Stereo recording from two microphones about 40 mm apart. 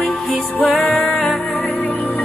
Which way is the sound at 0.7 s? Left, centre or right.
Centre.